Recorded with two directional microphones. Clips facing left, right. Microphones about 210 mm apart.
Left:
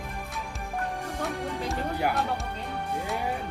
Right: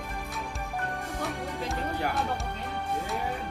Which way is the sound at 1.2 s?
Centre (ahead or behind).